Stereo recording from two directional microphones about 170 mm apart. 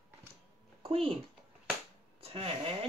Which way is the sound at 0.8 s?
35° right (ahead or behind).